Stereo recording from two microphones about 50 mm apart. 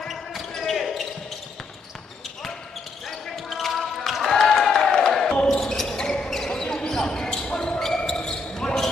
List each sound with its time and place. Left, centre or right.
0.0 s basketball bounce: centre
3.1 s basketball bounce: centre
5.3 s basketball bounce: centre